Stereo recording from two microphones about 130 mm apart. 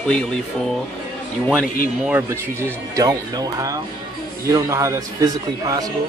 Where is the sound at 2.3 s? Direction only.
20° right (ahead or behind).